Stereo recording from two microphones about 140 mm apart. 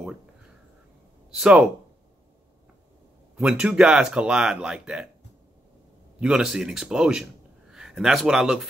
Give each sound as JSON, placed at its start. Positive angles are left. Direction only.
{"t": 1.3, "sound": "speech", "side_deg": -5}
{"t": 3.3, "sound": "speech", "side_deg": -5}
{"t": 6.1, "sound": "a man's voice", "side_deg": -5}